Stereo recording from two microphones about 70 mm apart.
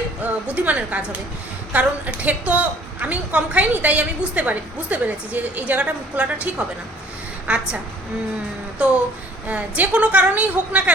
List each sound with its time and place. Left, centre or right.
0.2 s a woman's voice: right
8.8 s a woman's voice: centre